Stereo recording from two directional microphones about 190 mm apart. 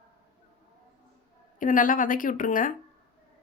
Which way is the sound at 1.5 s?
45° left (ahead or behind).